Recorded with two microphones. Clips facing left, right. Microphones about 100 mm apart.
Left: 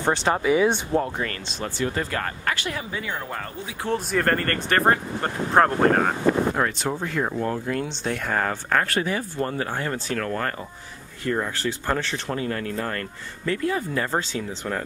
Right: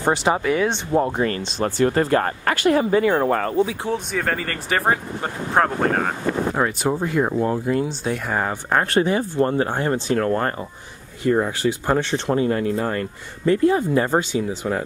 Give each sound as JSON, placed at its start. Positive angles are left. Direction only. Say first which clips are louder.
{"t": 0.0, "sound": "speech", "louder": "right 3 dB", "side_deg": -10}
{"t": 0.4, "sound": "speech", "louder": "left 1 dB", "side_deg": 5}
{"t": 0.9, "sound": "speech", "louder": "right 5 dB", "side_deg": -25}
{"t": 1.6, "sound": "speech", "louder": "right 8 dB", "side_deg": -45}
{"t": 2.5, "sound": "speech", "louder": "right 13 dB", "side_deg": -50}
{"t": 3.9, "sound": "speech", "louder": "left 1 dB", "side_deg": 0}
{"t": 6.6, "sound": "speech", "louder": "right 4 dB", "side_deg": -10}